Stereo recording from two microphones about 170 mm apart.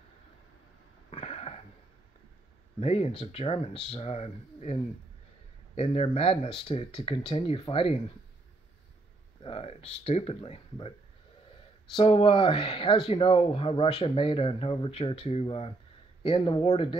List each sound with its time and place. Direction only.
1.1 s throat clearing: 35° left (ahead or behind)
2.8 s speech: 35° left (ahead or behind)
9.4 s speech: 35° left (ahead or behind)
11.9 s speech: 30° left (ahead or behind)